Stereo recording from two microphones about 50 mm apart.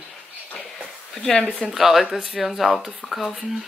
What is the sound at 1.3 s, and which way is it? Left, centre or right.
Speech, left.